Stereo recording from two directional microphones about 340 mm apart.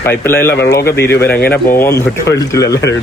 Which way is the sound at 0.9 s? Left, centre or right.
Centre.